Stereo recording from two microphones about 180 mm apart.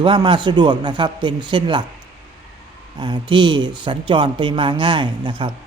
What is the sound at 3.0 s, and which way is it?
Speech, 25° right (ahead or behind).